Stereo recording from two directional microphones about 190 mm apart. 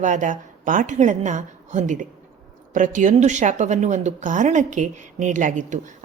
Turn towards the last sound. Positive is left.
turn(degrees=-40)  # may be behind; listen again after turning